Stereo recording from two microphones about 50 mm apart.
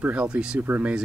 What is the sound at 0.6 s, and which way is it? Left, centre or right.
Speech, right.